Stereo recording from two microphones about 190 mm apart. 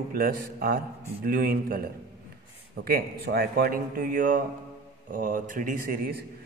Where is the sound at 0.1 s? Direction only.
50° right (ahead or behind).